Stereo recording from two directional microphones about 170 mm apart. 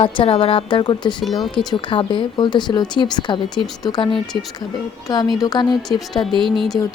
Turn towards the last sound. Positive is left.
turn(degrees=0)  # may be behind; listen again after turning